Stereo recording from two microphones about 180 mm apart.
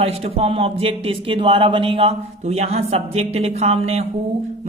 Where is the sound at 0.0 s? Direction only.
30° right (ahead or behind).